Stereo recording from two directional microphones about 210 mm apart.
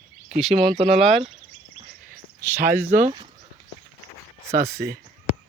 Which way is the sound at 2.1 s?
50° right (ahead or behind).